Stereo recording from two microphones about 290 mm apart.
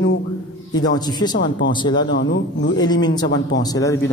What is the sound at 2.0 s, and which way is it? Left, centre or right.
Speech, left.